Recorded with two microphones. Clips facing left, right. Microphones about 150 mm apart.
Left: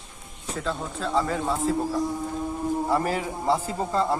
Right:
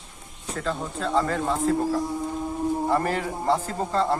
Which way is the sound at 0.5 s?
Centre (ahead or behind).